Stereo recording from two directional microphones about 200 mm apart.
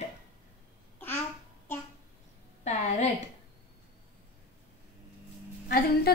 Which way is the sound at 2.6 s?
35° left (ahead or behind).